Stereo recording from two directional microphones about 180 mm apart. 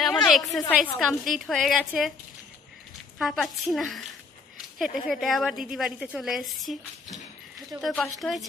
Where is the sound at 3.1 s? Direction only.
Centre (ahead or behind).